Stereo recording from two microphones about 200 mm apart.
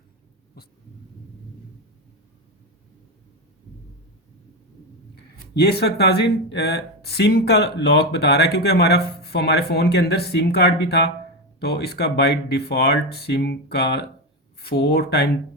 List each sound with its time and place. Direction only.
5.1 s speech: 55° left (ahead or behind)